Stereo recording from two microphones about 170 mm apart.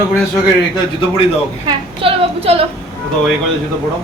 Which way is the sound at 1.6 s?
30° right (ahead or behind).